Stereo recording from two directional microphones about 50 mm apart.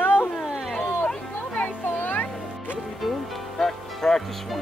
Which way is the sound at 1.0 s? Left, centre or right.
Centre.